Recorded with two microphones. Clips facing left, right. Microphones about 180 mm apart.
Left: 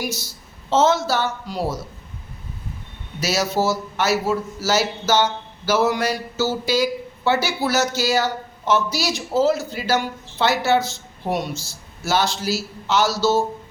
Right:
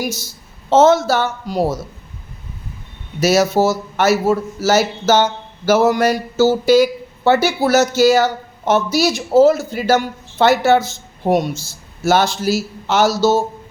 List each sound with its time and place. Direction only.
0.0 s speech: 45° right (ahead or behind)
3.2 s speech: 50° right (ahead or behind)